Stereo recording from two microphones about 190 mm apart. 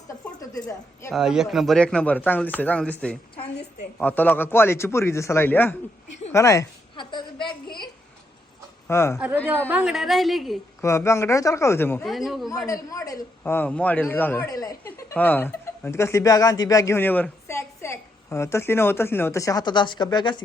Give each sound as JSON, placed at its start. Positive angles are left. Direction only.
{"t": 0.3, "sound": "a woman's voice", "side_deg": 20}
{"t": 1.1, "sound": "a man's voice", "side_deg": 0}
{"t": 6.3, "sound": "a sound", "side_deg": 15}
{"t": 8.9, "sound": "a man's voice", "side_deg": 15}
{"t": 9.1, "sound": "a woman's voice", "side_deg": -5}
{"t": 10.8, "sound": "a man's voice", "side_deg": 15}
{"t": 12.0, "sound": "a man's voice", "side_deg": 0}
{"t": 12.6, "sound": "a man's voice", "side_deg": 15}